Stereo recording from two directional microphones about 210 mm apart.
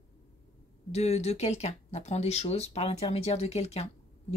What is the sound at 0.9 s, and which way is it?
Speech, 30° left (ahead or behind).